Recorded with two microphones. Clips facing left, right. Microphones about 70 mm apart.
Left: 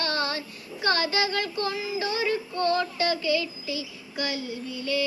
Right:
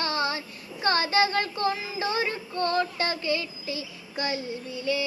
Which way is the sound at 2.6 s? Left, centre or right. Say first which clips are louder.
Left 1 dB; right.